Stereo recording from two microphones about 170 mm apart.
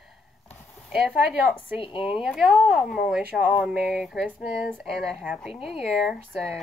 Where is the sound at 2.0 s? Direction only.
5° right (ahead or behind).